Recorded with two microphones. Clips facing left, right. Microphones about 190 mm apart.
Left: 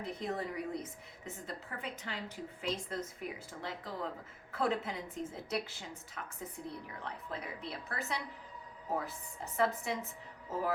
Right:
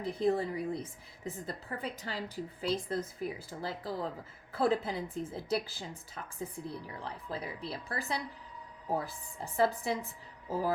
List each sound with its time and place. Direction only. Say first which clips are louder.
0.0 s a woman's voice: right 8 dB; 30° right (ahead or behind)